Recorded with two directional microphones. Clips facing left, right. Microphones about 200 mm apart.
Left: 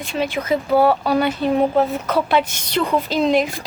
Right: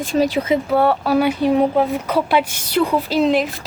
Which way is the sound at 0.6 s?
Centre (ahead or behind).